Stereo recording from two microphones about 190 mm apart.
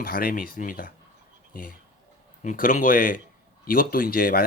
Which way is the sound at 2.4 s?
45° left (ahead or behind).